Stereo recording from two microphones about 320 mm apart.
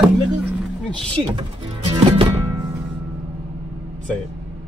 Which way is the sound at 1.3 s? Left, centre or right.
Centre.